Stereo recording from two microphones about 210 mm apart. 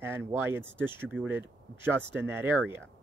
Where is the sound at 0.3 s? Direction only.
10° right (ahead or behind).